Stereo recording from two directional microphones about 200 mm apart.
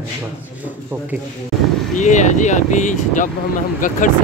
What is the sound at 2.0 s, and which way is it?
Speech, 35° left (ahead or behind).